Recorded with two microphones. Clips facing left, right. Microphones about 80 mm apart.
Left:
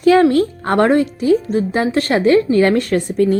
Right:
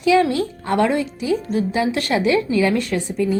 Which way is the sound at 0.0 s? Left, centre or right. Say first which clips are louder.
Left 5 dB; left.